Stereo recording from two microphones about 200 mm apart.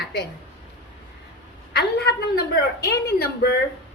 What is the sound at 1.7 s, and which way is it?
Speech, 55° left (ahead or behind).